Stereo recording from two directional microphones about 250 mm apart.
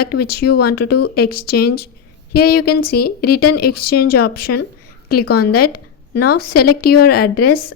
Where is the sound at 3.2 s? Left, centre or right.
Left.